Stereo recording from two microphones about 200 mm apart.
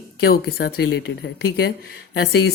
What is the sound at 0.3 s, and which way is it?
Speech, 50° left (ahead or behind).